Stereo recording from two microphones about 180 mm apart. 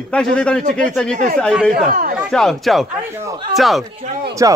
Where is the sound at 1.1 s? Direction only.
50° right (ahead or behind).